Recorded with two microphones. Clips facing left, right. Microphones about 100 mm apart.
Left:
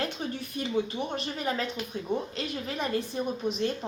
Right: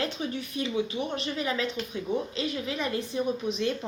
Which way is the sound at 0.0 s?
45° left (ahead or behind).